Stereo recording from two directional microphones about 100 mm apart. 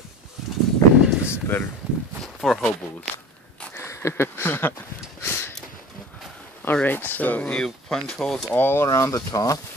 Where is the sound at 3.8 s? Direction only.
25° left (ahead or behind).